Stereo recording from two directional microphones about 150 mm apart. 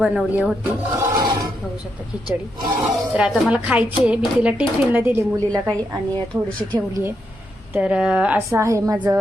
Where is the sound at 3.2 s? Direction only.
10° right (ahead or behind).